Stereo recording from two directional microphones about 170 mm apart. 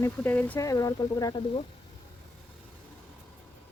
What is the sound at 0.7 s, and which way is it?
Speech, 20° left (ahead or behind).